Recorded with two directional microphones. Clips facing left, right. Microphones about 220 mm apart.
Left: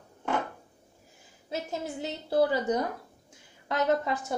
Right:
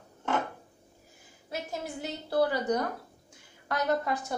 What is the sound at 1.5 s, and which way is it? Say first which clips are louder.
A woman's voice: left 2 dB; 25° left (ahead or behind).